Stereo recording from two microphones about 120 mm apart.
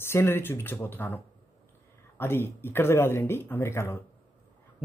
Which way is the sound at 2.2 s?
20° left (ahead or behind).